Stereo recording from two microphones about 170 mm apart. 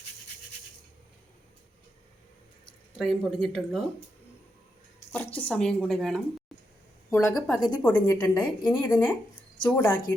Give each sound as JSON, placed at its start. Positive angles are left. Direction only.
{"t": 2.9, "sound": "speech", "side_deg": 0}
{"t": 5.4, "sound": "speech", "side_deg": 5}
{"t": 7.1, "sound": "a woman's voice", "side_deg": 15}
{"t": 7.3, "sound": "speech", "side_deg": 0}
{"t": 7.8, "sound": "a woman's voice", "side_deg": 10}